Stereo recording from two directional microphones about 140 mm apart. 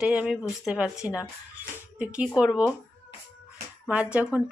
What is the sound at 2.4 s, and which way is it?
Speech, 10° right (ahead or behind).